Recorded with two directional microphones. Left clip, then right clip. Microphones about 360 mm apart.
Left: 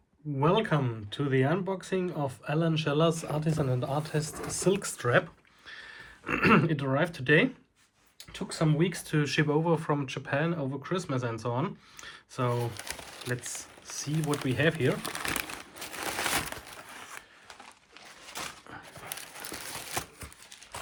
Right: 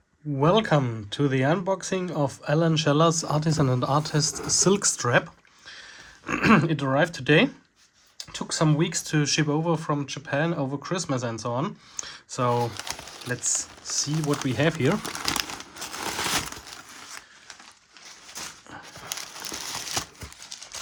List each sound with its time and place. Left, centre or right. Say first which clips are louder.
0.3 s speech: right 5 dB; centre
6.2 s speech: right 3 dB; centre
19.0 s a sound: right 7 dB; centre